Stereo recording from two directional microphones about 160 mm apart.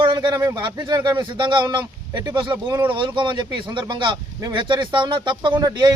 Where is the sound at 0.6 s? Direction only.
25° right (ahead or behind).